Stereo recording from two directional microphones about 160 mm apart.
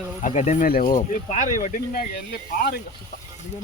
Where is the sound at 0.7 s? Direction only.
65° left (ahead or behind).